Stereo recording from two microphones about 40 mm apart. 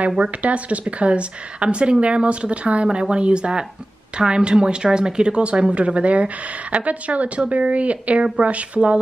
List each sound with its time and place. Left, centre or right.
0.2 s a woman's voice: right